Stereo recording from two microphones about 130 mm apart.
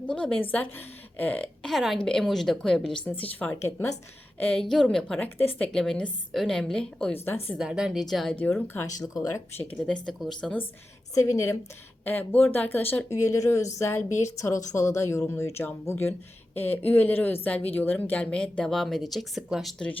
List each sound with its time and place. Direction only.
0.0 s a woman's voice: 10° left (ahead or behind)
7.6 s a woman's voice: 5° right (ahead or behind)
8.4 s a woman's voice: 15° left (ahead or behind)
9.0 s a woman's voice: 30° left (ahead or behind)
9.6 s a woman's voice: 10° left (ahead or behind)
11.1 s a woman's voice: 25° left (ahead or behind)
12.0 s a woman's voice: 15° left (ahead or behind); by 19.7 s 5° right (ahead or behind)